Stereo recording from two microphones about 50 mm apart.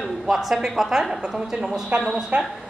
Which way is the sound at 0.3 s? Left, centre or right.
Centre.